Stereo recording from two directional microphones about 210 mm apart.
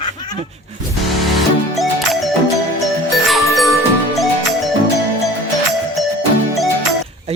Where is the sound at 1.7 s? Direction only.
Centre (ahead or behind).